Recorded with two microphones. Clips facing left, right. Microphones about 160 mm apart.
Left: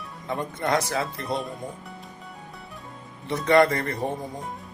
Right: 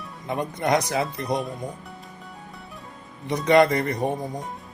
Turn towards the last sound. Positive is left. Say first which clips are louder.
# right 2 dB
turn(degrees=-15)  # may be behind; listen again after turning